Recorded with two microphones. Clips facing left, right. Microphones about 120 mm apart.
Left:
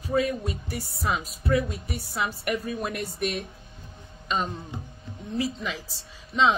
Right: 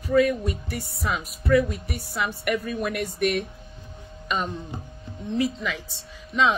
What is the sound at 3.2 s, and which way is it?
Speech, 55° right (ahead or behind).